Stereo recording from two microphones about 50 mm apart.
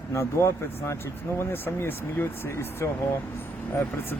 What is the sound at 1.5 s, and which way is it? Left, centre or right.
Speech, left.